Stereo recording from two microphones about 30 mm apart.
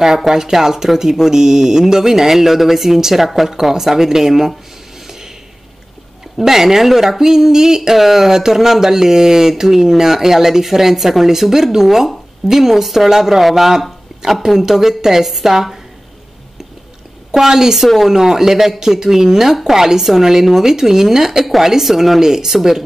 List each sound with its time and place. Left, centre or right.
0.3 s speech: centre
6.3 s speech: centre
17.4 s speech: centre
17.8 s speech: centre
18.1 s speech: centre
22.2 s speech: centre